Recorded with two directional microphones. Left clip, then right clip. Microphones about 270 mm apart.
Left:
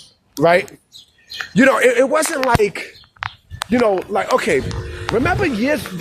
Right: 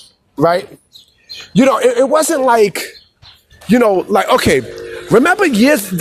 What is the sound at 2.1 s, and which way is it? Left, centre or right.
Speech, centre.